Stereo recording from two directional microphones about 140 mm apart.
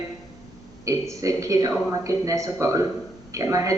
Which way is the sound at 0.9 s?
25° right (ahead or behind).